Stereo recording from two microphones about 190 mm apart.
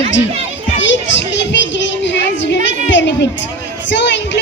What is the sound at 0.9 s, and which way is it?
Music, 70° left (ahead or behind).